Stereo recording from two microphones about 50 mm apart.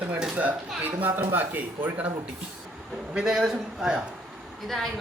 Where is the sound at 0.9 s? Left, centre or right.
Right.